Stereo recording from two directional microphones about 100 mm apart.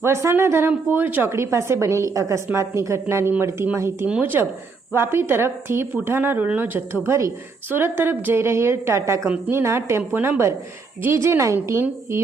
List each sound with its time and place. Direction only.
0.0 s a woman's voice: 30° right (ahead or behind)